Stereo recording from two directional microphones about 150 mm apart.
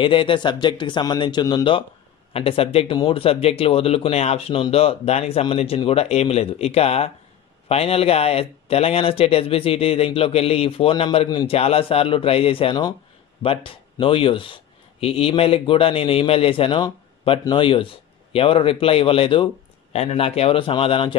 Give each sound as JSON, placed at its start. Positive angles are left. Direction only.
{"t": 0.0, "sound": "speech", "side_deg": 35}